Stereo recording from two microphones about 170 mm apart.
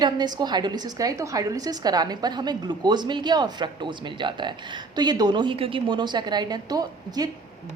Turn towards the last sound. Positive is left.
turn(degrees=-20)  # may be behind; listen again after turning